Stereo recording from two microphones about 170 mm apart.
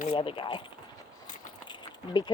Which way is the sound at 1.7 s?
25° left (ahead or behind).